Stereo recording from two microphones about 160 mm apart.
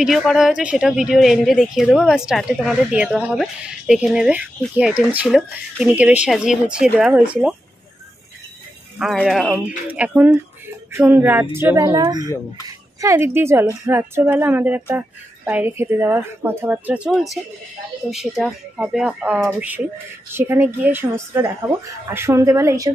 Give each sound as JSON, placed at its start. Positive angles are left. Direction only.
{"t": 0.0, "sound": "speech", "side_deg": 0}
{"t": 8.9, "sound": "a woman's voice", "side_deg": 0}